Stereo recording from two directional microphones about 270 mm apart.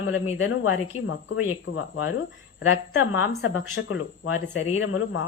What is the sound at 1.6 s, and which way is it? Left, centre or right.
Speech, left.